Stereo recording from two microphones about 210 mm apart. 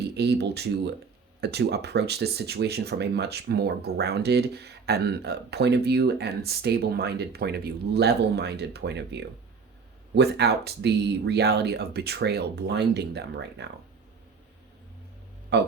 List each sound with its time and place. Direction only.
0.0 s speech: 50° right (ahead or behind)
15.5 s speech: 55° right (ahead or behind)